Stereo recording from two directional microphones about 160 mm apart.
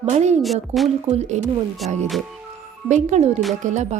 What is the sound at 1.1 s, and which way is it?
Speech, 45° right (ahead or behind).